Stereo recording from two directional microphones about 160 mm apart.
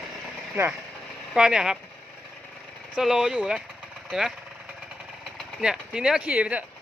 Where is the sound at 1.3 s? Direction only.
5° right (ahead or behind).